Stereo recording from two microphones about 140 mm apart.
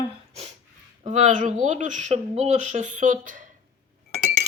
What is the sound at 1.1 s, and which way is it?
Speech, 55° right (ahead or behind).